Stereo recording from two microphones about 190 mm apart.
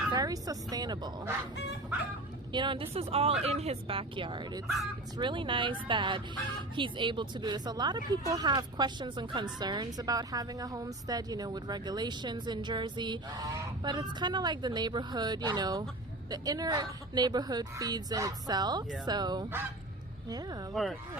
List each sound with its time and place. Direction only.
0.1 s speech: 20° right (ahead or behind)
2.5 s speech: 25° right (ahead or behind)
4.6 s speech: centre (ahead or behind)
5.1 s speech: 25° right (ahead or behind)
20.8 s speech: centre (ahead or behind)